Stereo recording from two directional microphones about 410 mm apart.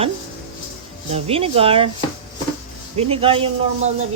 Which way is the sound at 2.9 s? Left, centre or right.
Centre.